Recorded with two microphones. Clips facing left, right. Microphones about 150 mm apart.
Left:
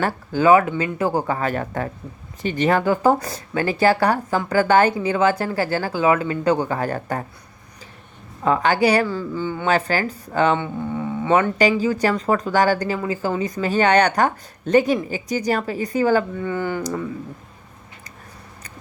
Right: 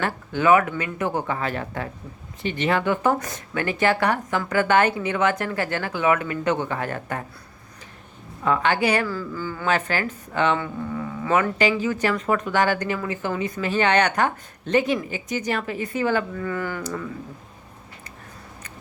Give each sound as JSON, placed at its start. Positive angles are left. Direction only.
{"t": 0.0, "sound": "speech", "side_deg": 30}
{"t": 8.4, "sound": "speech", "side_deg": 35}
{"t": 9.0, "sound": "speech", "side_deg": 25}
{"t": 16.4, "sound": "speech", "side_deg": 25}